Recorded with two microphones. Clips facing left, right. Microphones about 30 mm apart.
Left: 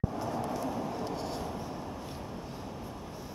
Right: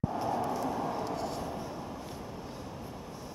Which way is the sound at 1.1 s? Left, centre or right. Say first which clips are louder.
Right 1 dB; centre.